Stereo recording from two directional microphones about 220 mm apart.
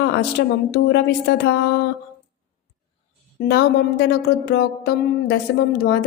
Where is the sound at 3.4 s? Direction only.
45° left (ahead or behind).